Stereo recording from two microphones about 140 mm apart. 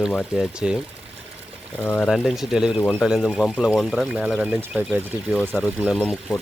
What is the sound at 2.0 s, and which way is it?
Speech, centre (ahead or behind).